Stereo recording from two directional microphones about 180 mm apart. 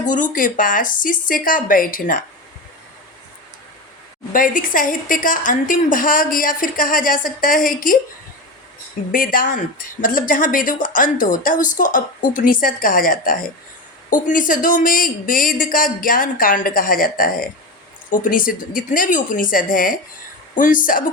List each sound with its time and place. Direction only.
0.0 s speech: 45° left (ahead or behind)
4.3 s speech: 50° left (ahead or behind)
9.1 s speech: 50° left (ahead or behind)